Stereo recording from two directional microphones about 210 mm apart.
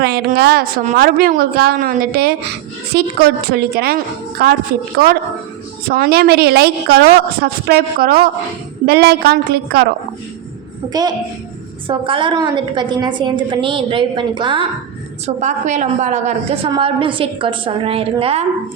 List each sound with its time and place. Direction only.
0.0 s a woman's voice: 50° right (ahead or behind)
5.9 s a woman's voice: 45° right (ahead or behind)
10.8 s a woman's voice: 20° right (ahead or behind)
15.4 s a woman's voice: 35° right (ahead or behind)